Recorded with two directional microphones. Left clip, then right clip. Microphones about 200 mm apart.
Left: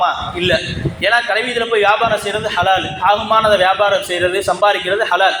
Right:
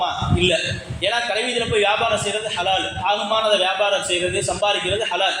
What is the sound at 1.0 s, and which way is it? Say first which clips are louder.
A man's voice: left 6 dB; 15° left (ahead or behind).